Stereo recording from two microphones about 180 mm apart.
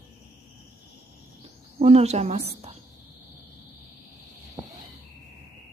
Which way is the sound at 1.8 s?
35° right (ahead or behind).